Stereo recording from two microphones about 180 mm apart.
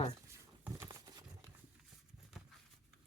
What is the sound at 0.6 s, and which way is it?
Horse, 15° right (ahead or behind).